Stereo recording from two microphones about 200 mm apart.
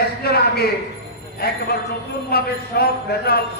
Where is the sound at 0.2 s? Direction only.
50° left (ahead or behind).